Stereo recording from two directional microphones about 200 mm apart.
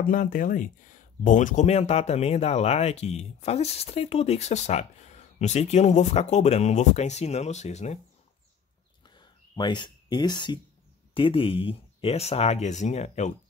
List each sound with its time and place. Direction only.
0.0 s speech: 45° left (ahead or behind)
9.0 s a sound: 20° left (ahead or behind)
11.1 s speech: 25° left (ahead or behind)